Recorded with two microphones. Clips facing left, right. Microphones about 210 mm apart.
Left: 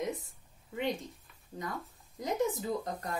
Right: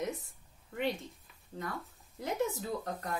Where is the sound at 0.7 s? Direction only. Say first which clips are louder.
Even; 15° left (ahead or behind).